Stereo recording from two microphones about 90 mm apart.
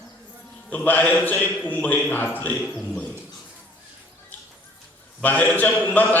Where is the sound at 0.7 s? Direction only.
20° left (ahead or behind).